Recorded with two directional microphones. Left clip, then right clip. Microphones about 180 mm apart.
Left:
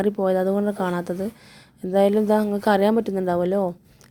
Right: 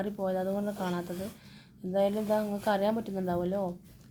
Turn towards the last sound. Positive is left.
turn(degrees=40)  # may be behind; listen again after turning